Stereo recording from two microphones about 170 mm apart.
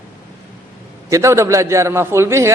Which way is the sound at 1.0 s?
15° right (ahead or behind).